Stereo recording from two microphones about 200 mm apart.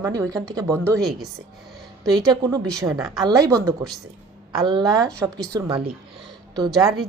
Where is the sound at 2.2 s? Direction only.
20° right (ahead or behind).